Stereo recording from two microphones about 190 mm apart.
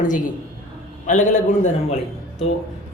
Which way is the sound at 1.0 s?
40° left (ahead or behind).